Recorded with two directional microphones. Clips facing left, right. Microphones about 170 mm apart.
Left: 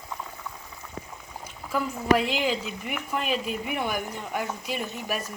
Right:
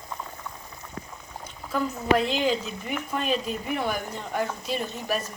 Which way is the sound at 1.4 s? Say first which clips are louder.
Right 1 dB; 10° left (ahead or behind).